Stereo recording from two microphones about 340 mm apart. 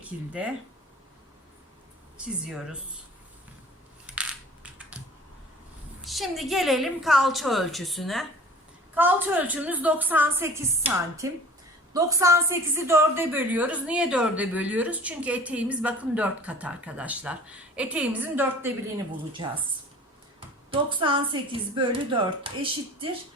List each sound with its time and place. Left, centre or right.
0.0 s a woman's voice: centre
2.1 s a woman's voice: centre
4.0 s crushing: centre
6.1 s a woman's voice: centre
20.7 s speech: centre